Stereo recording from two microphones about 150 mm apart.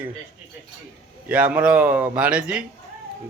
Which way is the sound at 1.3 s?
10° right (ahead or behind).